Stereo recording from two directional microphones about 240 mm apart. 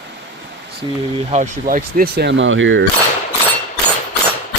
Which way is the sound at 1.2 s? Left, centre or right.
Right.